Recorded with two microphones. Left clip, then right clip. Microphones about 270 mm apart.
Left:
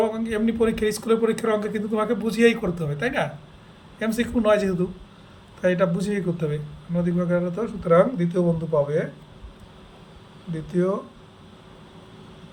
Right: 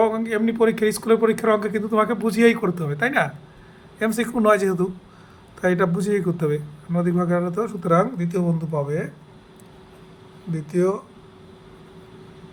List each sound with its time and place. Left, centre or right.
0.0 s a man's voice: centre; by 9.0 s right
10.5 s a man's voice: right